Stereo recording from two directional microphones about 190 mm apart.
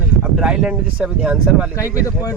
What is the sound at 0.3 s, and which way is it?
Speech, 5° right (ahead or behind).